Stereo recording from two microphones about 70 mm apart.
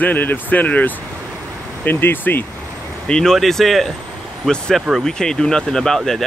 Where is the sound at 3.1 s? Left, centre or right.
Centre.